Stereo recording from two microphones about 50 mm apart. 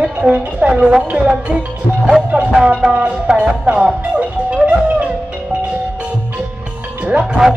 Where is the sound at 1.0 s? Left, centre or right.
Right.